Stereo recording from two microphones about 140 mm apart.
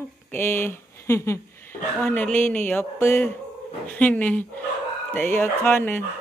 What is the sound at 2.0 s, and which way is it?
Speech, 10° left (ahead or behind).